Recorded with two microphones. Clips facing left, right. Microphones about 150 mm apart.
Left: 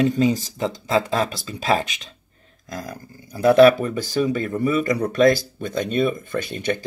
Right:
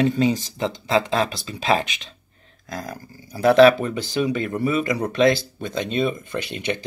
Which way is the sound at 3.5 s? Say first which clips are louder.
Left 1 dB; 45° left (ahead or behind).